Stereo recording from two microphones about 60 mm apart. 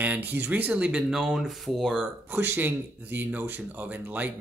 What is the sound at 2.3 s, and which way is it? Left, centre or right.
Speech, right.